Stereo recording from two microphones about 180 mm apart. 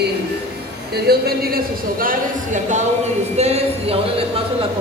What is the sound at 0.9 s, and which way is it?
Speech, 60° right (ahead or behind).